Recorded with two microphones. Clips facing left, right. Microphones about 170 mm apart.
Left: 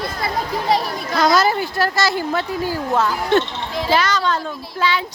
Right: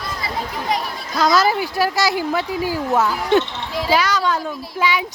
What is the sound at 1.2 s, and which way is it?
Speech, 5° right (ahead or behind).